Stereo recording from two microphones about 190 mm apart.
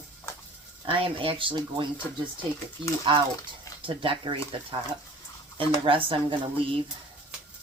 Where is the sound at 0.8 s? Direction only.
30° right (ahead or behind).